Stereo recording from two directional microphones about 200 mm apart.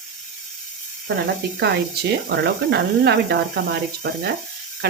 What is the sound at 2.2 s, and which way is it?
Speech, 60° right (ahead or behind).